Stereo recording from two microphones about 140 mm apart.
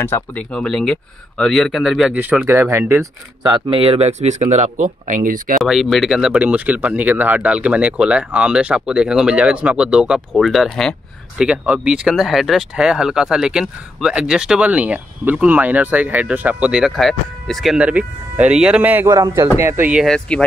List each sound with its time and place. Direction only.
0.0 s speech: 15° left (ahead or behind); by 3.0 s 15° right (ahead or behind)
3.4 s speech: 35° right (ahead or behind); by 5.4 s 75° right (ahead or behind)
5.6 s speech: centre (ahead or behind)
11.4 s speech: 10° right (ahead or behind)
19.1 s speech: 25° right (ahead or behind)
20.1 s speech: 5° left (ahead or behind)